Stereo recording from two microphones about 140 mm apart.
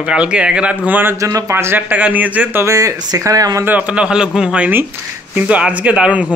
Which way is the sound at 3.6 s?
10° right (ahead or behind).